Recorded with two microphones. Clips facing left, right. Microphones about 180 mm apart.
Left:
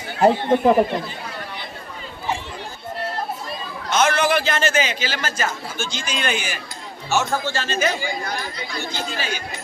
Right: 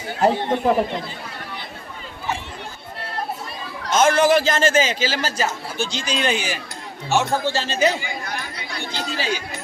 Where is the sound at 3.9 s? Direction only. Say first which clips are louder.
Right 3 dB; 45° right (ahead or behind).